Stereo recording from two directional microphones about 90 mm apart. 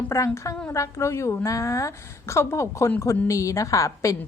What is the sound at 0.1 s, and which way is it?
Speech, 30° left (ahead or behind).